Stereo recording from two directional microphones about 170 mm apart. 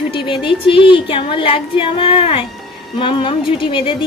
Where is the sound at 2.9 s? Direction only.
30° left (ahead or behind).